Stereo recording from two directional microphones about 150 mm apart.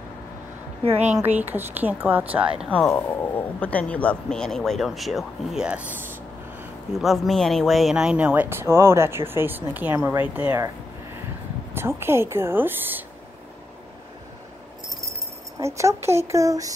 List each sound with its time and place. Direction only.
1.2 s speech: 10° right (ahead or behind)
2.7 s speech: 10° left (ahead or behind); by 5.9 s 5° right (ahead or behind)
7.0 s speech: centre (ahead or behind)
11.7 s speech: 15° right (ahead or behind)
15.6 s speech: 20° right (ahead or behind)